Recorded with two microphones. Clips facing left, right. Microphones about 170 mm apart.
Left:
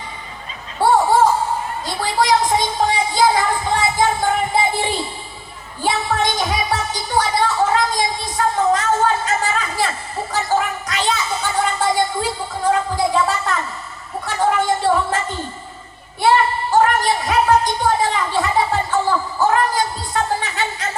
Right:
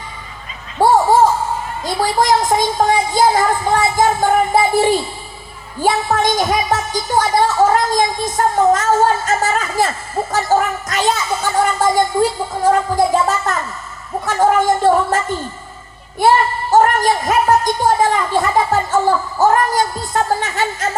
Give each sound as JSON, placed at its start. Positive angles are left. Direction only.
{"t": 1.8, "sound": "speech", "side_deg": -45}
{"t": 16.7, "sound": "speech", "side_deg": -45}